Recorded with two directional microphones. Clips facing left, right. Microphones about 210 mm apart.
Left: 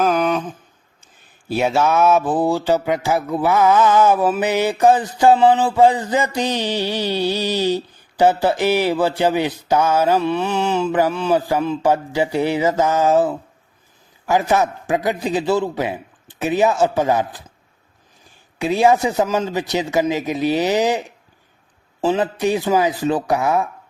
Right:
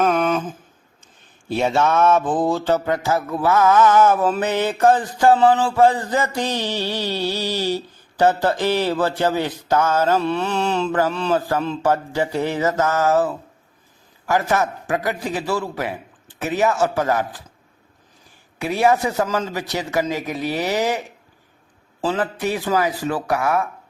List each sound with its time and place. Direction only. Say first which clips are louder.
0.0 s a sound: left 1 dB; centre (ahead or behind)
1.5 s mantra: left 1 dB; 5° left (ahead or behind)
10.7 s mantra: left 3 dB; 5° left (ahead or behind)
14.3 s a man's voice: left 3 dB; 15° left (ahead or behind)
18.6 s mantra: left 3 dB; 20° left (ahead or behind)
22.0 s a man's voice: left 4 dB; 20° left (ahead or behind)